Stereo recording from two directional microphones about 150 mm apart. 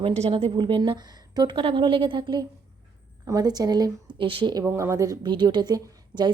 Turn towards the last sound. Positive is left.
turn(degrees=-30)  # may be behind; listen again after turning